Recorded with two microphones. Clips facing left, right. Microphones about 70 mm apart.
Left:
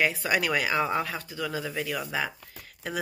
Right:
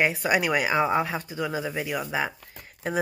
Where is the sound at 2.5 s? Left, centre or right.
Right.